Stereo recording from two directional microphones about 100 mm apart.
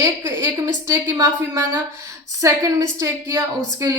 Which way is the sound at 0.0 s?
35° right (ahead or behind).